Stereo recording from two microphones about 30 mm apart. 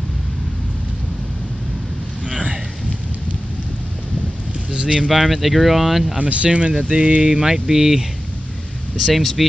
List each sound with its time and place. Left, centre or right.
4.7 s speech: right
5.1 s speech: centre
6.1 s speech: right
6.9 s a sound: right; by 8.0 s centre
9.0 s speech: centre